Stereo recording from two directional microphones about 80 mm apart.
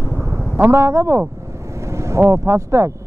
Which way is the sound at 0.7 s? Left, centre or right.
Right.